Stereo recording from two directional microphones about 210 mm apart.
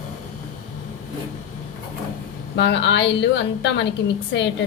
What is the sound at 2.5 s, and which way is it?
A woman's voice, 55° left (ahead or behind).